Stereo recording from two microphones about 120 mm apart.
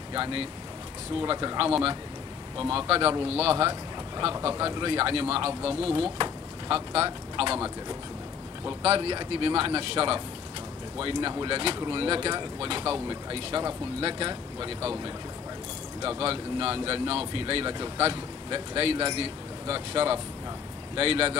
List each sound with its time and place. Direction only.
0.1 s speech: 45° right (ahead or behind)
2.7 s speech: 50° right (ahead or behind)
8.8 s speech: 55° right (ahead or behind)